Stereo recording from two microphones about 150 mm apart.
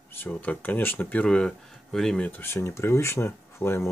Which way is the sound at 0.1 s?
10° left (ahead or behind).